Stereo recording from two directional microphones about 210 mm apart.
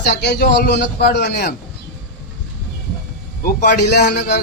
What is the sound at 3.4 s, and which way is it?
A man's voice, 45° left (ahead or behind).